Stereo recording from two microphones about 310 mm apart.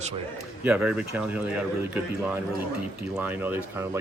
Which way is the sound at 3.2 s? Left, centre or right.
Centre.